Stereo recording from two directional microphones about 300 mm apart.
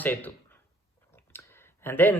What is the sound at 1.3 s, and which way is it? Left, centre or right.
Clicking, centre.